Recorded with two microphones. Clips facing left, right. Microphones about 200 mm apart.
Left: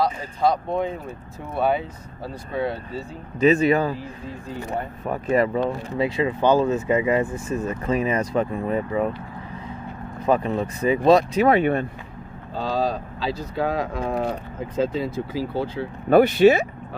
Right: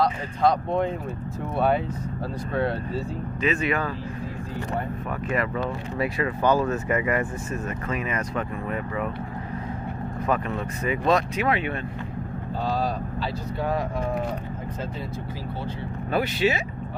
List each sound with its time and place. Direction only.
0.0 s speech: 5° left (ahead or behind)
2.5 s speech: centre (ahead or behind)
3.3 s speech: 40° left (ahead or behind)
5.0 s speech: 35° left (ahead or behind)
5.9 s speech: 25° left (ahead or behind)
10.2 s speech: 30° left (ahead or behind); by 11.8 s 45° left (ahead or behind)
12.7 s speech: 90° left
16.1 s speech: 55° left (ahead or behind)